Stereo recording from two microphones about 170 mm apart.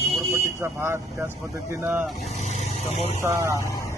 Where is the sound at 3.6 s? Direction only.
20° left (ahead or behind).